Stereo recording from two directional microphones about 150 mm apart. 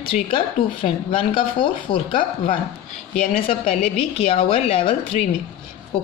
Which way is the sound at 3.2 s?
40° left (ahead or behind).